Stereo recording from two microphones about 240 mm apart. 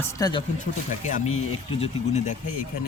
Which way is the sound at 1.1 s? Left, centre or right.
Left.